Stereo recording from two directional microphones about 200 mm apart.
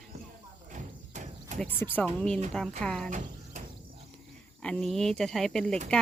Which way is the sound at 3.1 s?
40° right (ahead or behind).